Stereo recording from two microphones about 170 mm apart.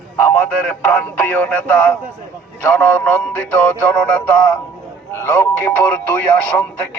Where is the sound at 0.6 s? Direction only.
10° left (ahead or behind).